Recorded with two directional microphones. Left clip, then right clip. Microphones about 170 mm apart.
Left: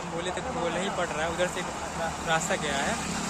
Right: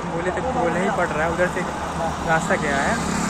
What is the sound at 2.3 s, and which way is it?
Speech, 20° left (ahead or behind).